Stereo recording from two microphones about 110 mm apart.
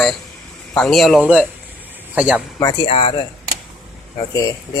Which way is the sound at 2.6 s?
40° left (ahead or behind).